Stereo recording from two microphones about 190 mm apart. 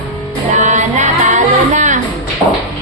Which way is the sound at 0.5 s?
40° right (ahead or behind).